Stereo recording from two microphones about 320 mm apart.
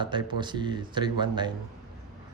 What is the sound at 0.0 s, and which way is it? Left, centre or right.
Speech, centre.